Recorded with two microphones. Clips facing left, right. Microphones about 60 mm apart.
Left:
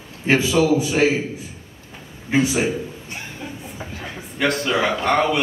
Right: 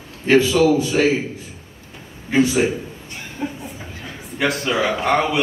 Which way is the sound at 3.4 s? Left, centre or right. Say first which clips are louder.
Right 10 dB; right.